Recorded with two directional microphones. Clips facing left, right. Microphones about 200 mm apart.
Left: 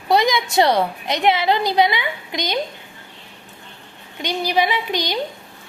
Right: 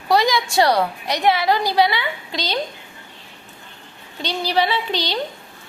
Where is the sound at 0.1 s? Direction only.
20° left (ahead or behind).